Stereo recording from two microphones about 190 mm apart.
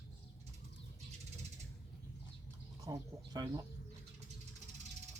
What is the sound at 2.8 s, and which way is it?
Speech, 20° right (ahead or behind).